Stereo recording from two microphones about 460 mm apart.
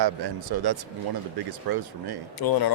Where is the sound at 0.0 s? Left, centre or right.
Right.